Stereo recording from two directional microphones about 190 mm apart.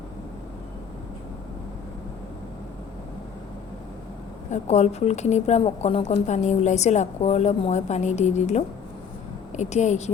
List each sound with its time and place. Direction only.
4.5 s a woman's voice: 35° left (ahead or behind)